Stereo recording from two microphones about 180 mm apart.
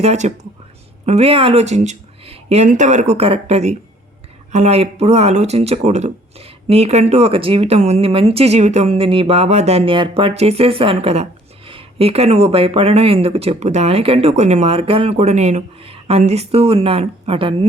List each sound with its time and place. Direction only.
0.0 s speech: 40° right (ahead or behind)